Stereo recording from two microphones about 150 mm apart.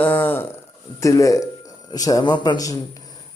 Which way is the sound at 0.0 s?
10° left (ahead or behind).